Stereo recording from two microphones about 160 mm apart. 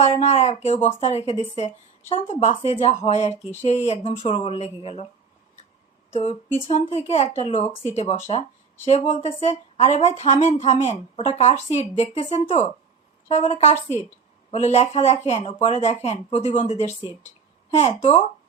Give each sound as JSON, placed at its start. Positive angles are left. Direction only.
{"t": 0.0, "sound": "speech", "side_deg": 45}
{"t": 6.1, "sound": "speech", "side_deg": 40}